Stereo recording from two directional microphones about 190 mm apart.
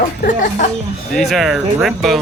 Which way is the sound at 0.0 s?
45° left (ahead or behind).